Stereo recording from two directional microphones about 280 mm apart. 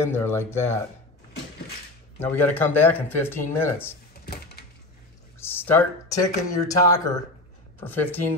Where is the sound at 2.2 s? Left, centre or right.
Centre.